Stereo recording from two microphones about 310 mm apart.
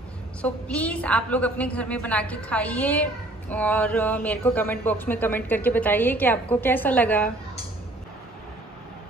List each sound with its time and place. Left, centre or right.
0.4 s a woman's voice: centre